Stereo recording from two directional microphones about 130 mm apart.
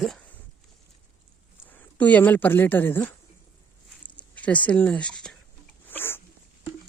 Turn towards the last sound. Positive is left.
turn(degrees=15)  # may be behind; listen again after turning